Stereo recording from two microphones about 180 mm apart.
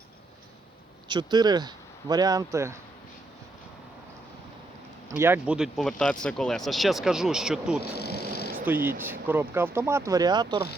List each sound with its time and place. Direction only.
1.0 s speech: 25° right (ahead or behind)
5.1 s speech: 10° right (ahead or behind)
7.8 s insect: 60° left (ahead or behind)
8.6 s speech: 10° right (ahead or behind)